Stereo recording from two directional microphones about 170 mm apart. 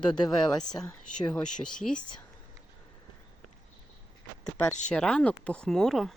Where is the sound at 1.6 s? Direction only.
5° left (ahead or behind).